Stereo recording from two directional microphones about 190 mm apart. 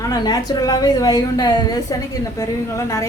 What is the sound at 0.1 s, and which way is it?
A woman's voice, 20° left (ahead or behind).